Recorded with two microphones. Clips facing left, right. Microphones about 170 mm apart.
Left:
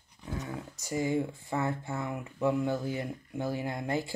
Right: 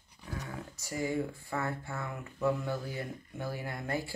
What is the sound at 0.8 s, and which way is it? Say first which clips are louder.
Speech: left 3 dB; 20° left (ahead or behind).